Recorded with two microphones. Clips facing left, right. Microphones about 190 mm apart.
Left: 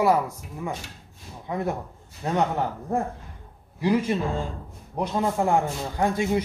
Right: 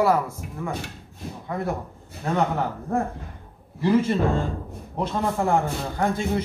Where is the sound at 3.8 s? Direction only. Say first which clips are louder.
Right 2 dB; 15° left (ahead or behind).